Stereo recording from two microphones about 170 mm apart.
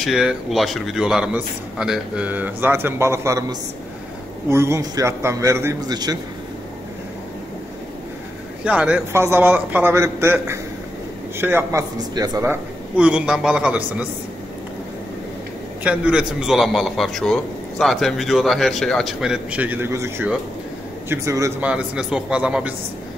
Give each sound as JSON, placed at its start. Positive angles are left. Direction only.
{"t": 0.0, "sound": "a man's voice", "side_deg": 0}
{"t": 8.6, "sound": "a man's voice", "side_deg": -5}
{"t": 12.9, "sound": "a man's voice", "side_deg": -5}
{"t": 15.8, "sound": "a man's voice", "side_deg": -5}
{"t": 21.6, "sound": "a man's voice", "side_deg": -5}